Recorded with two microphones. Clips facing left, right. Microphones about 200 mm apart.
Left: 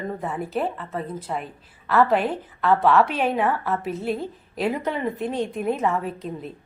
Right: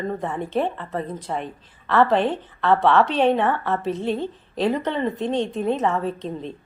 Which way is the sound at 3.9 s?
10° left (ahead or behind).